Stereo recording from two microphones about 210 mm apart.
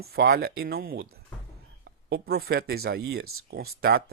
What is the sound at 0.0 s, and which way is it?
Speech, 45° right (ahead or behind).